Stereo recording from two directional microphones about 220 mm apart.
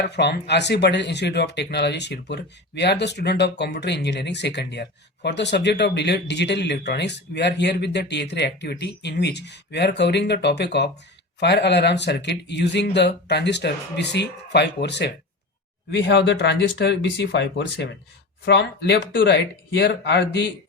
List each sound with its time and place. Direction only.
0.0 s speech: 50° left (ahead or behind)